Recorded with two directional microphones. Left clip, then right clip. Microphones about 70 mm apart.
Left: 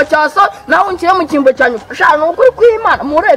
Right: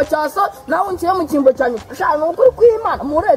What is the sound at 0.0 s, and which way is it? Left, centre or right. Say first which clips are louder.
A woman's voice: left 7 dB; left.